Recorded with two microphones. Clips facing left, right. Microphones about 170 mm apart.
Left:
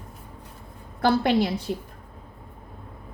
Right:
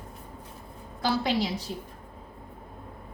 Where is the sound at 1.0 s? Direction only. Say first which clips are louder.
Left 6 dB; 55° left (ahead or behind).